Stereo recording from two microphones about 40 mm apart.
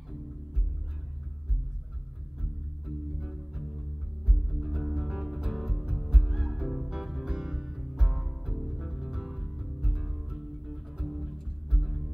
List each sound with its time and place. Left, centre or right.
2.8 s music: centre